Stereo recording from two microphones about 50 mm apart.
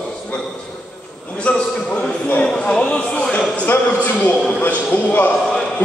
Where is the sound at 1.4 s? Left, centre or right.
Left.